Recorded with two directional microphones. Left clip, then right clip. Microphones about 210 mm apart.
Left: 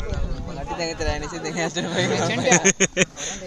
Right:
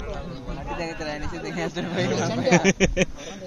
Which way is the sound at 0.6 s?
35° left (ahead or behind).